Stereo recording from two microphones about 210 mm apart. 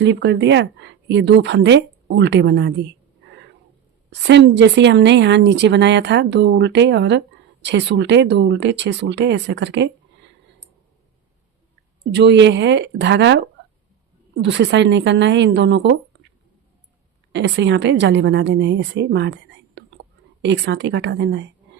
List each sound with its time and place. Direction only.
0.0 s a woman's voice: 55° right (ahead or behind)
4.1 s a woman's voice: 55° right (ahead or behind)
12.1 s a woman's voice: 55° right (ahead or behind)
14.4 s a woman's voice: 55° right (ahead or behind)
17.3 s a woman's voice: 55° right (ahead or behind)